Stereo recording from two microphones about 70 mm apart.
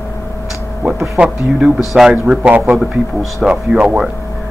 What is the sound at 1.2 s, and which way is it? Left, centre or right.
Speech, right.